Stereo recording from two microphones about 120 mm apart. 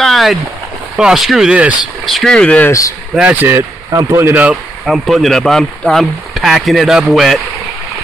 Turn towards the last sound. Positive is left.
turn(degrees=0)  # may be behind; listen again after turning